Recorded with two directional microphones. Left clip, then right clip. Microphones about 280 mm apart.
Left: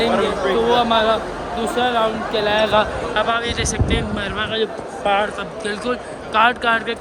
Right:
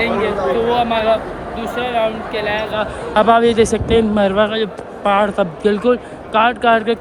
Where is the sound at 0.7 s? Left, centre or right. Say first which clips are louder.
Even; centre.